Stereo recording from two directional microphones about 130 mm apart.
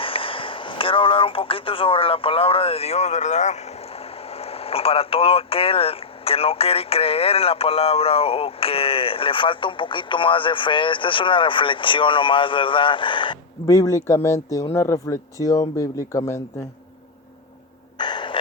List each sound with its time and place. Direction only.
0.0 s speech: 45° left (ahead or behind)
13.7 s speech: 25° left (ahead or behind)
17.9 s a sound: 35° left (ahead or behind)